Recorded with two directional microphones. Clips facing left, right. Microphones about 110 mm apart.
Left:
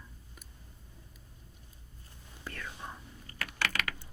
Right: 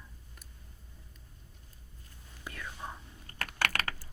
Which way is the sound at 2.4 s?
10° right (ahead or behind).